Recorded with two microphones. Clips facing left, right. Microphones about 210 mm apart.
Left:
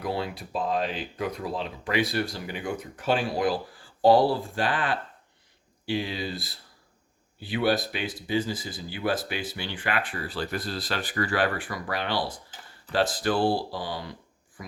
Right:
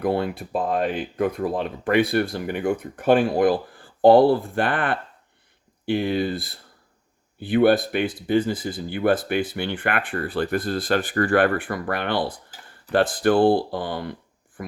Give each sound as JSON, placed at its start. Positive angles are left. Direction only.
{"t": 0.0, "sound": "speech", "side_deg": -55}